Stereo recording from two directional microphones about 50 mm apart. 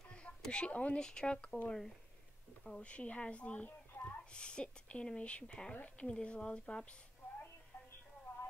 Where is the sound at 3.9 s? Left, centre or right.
Left.